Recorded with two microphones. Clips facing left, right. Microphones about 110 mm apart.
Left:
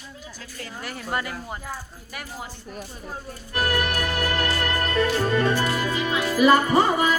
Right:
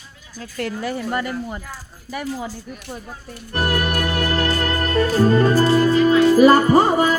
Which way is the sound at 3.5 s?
35° right (ahead or behind).